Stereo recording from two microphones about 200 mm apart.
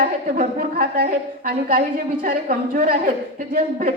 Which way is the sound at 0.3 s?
45° right (ahead or behind).